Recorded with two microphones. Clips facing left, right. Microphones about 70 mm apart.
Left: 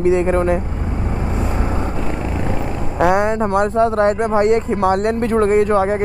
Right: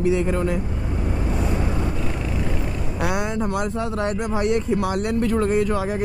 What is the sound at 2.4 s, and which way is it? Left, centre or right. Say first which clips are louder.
Speech: left 5 dB; left.